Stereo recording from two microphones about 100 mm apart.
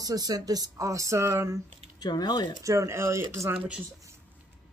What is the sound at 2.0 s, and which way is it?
Speech, 45° left (ahead or behind).